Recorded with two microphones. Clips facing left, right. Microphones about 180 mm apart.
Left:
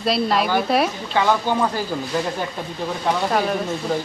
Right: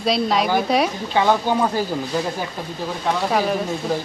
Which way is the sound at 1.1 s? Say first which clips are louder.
Right 1 dB; 15° right (ahead or behind).